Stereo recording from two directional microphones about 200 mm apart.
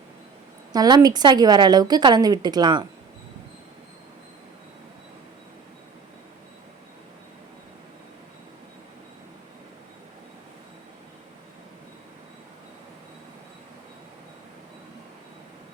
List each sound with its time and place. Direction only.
0.7 s a woman's voice: 20° right (ahead or behind)